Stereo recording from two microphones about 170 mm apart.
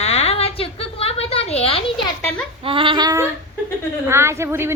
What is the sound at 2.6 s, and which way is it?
Singing, 30° right (ahead or behind).